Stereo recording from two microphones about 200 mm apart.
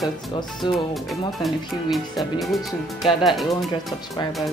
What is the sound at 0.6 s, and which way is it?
Speech, centre (ahead or behind).